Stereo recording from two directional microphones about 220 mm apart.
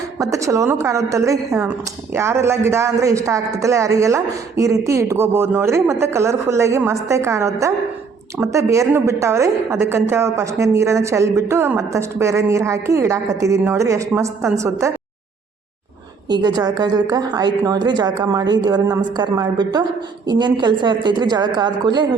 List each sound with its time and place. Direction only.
0.2 s a woman's voice: 15° right (ahead or behind)
16.3 s a woman's voice: 20° right (ahead or behind)